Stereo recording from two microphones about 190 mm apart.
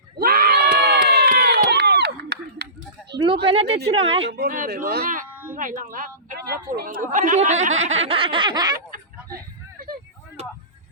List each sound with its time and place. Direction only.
0.2 s crowd: 50° right (ahead or behind)
1.7 s a sound: 60° right (ahead or behind)
3.4 s speech: 30° right (ahead or behind)
3.8 s snicker: 30° right (ahead or behind)
4.3 s a woman's voice: 50° right (ahead or behind)
8.0 s snicker: 30° right (ahead or behind)